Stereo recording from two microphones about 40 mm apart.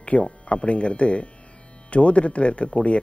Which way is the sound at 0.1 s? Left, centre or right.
Left.